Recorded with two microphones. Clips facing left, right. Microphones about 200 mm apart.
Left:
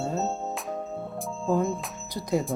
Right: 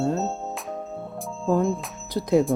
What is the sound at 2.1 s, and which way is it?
Speech, 75° right (ahead or behind).